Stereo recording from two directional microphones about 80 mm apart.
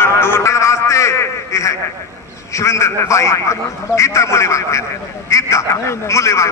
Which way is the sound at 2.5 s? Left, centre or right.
Left.